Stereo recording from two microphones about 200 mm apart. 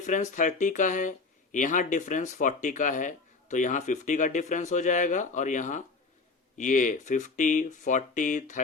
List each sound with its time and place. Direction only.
0.0 s speech: 35° left (ahead or behind)